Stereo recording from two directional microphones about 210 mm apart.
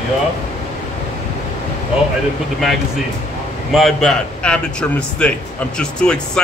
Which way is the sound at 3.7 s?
Centre (ahead or behind).